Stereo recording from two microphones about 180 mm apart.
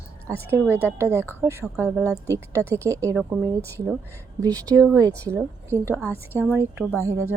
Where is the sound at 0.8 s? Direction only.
15° right (ahead or behind).